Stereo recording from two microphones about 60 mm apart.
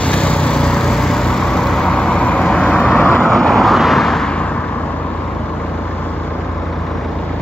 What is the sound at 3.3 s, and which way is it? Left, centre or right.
Vehicle, centre.